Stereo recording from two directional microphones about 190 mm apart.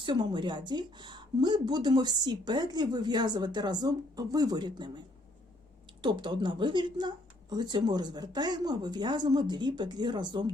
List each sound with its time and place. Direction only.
0.0 s speech: 25° right (ahead or behind)
6.0 s speech: 25° right (ahead or behind)